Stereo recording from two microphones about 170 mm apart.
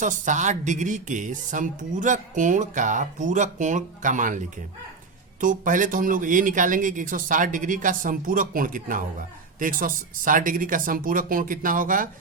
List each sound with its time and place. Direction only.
0.0 s speech: 45° right (ahead or behind)